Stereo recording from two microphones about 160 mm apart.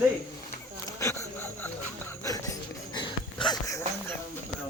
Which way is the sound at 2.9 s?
30° left (ahead or behind).